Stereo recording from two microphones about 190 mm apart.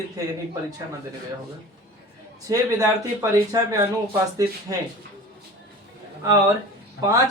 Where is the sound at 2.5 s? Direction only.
15° right (ahead or behind).